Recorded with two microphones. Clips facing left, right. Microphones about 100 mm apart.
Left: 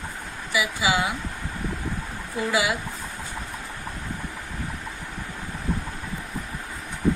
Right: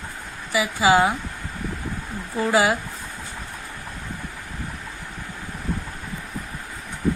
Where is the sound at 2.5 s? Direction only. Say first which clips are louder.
Right 5 dB; 40° right (ahead or behind).